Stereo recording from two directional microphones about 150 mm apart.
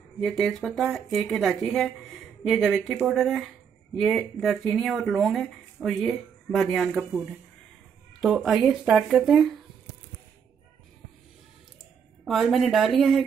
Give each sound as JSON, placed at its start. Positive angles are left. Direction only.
{"t": 0.2, "sound": "speech", "side_deg": 0}
{"t": 12.3, "sound": "speech", "side_deg": 0}